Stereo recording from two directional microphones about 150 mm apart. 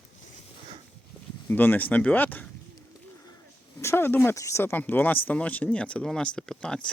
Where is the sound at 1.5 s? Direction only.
15° left (ahead or behind).